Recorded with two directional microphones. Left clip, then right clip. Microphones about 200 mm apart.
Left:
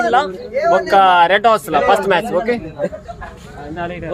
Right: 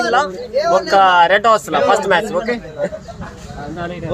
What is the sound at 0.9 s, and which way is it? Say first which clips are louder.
A man's voice: even; 15° left (ahead or behind).